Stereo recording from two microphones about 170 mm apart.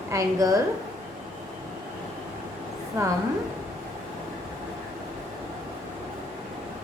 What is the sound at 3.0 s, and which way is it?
Speech, 15° right (ahead or behind).